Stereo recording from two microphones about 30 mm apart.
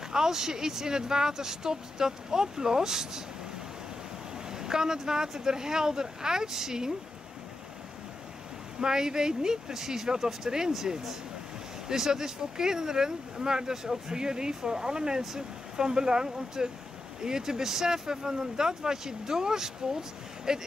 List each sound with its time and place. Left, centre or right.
0.1 s speech: centre
4.5 s speech: right
8.7 s speech: right
11.9 s speech: centre